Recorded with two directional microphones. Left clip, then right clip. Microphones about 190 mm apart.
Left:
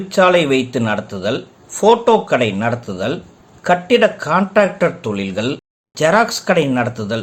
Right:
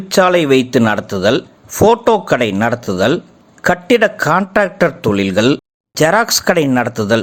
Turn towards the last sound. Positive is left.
turn(degrees=-40)  # may be behind; listen again after turning